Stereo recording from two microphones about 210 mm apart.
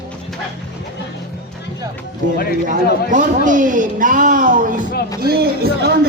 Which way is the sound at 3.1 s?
40° right (ahead or behind).